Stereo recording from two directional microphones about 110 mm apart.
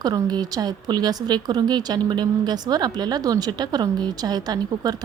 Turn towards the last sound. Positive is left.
turn(degrees=-35)  # may be behind; listen again after turning